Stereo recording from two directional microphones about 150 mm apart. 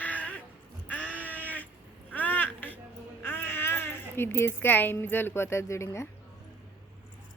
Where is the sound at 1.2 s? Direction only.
10° left (ahead or behind).